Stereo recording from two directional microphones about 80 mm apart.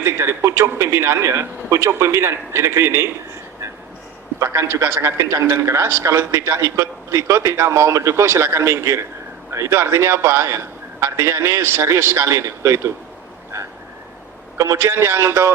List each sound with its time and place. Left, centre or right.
0.0 s a man's voice: right
4.4 s a man's voice: right
14.6 s a man's voice: right